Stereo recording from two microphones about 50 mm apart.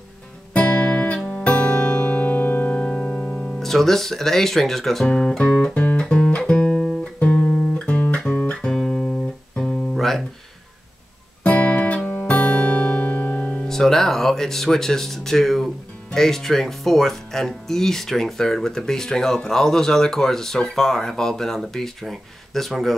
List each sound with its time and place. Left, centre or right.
0.5 s music: left
3.5 s speech: centre
5.0 s speech: centre
5.9 s music: centre
7.2 s music: left
9.9 s guitar: centre
11.4 s guitar: left
12.3 s music: left
13.7 s speech: centre